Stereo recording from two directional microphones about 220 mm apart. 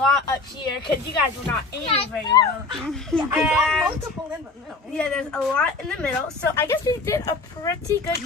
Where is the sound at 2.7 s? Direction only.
5° left (ahead or behind).